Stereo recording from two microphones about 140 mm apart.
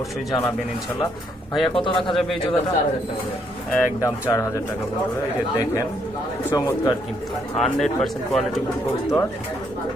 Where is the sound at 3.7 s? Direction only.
20° left (ahead or behind).